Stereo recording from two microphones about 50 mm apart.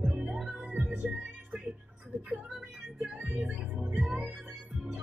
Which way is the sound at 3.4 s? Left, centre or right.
Centre.